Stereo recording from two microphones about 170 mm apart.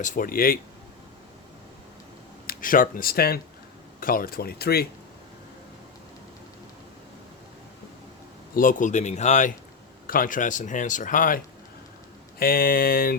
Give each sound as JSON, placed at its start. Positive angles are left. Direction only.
{"t": 0.0, "sound": "speech", "side_deg": 50}
{"t": 2.5, "sound": "speech", "side_deg": 55}
{"t": 8.5, "sound": "speech", "side_deg": 50}
{"t": 10.1, "sound": "speech", "side_deg": 55}
{"t": 12.4, "sound": "speech", "side_deg": 60}